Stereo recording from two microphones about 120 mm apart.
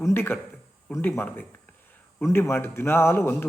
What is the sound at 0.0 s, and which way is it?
A man's voice, 20° left (ahead or behind).